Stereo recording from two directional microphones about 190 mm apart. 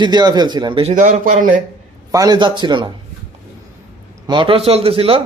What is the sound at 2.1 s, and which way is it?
Speech, 20° right (ahead or behind).